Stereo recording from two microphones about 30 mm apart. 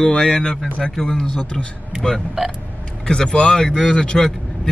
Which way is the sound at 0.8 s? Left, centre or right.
Left.